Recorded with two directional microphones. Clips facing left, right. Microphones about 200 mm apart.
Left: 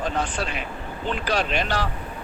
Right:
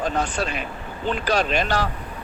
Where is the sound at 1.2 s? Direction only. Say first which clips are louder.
Right 3 dB; 45° right (ahead or behind).